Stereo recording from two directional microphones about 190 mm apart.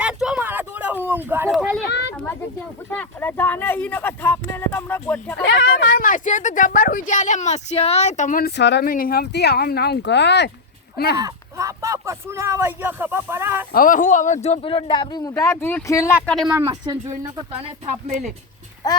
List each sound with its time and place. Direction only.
0.0 s a sound: 5° right (ahead or behind)
1.9 s a sound: 65° left (ahead or behind)
2.9 s speech: 10° left (ahead or behind)
5.4 s speech: 65° left (ahead or behind)
6.0 s speech: 45° left (ahead or behind)
11.2 s speech: 15° right (ahead or behind)
13.7 s speech: 45° left (ahead or behind); by 16.1 s 15° left (ahead or behind)
16.2 s speech: centre (ahead or behind)
16.5 s speech: 15° right (ahead or behind)